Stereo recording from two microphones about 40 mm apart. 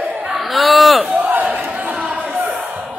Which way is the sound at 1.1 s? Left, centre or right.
Right.